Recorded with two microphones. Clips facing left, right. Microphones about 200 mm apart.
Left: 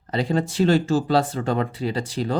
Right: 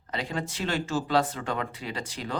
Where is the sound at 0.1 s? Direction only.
35° left (ahead or behind).